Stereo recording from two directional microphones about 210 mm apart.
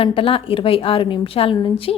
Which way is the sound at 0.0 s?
25° left (ahead or behind).